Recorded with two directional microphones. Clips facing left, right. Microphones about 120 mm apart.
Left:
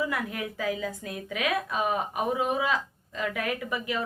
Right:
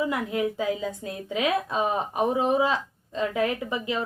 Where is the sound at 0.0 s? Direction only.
25° right (ahead or behind).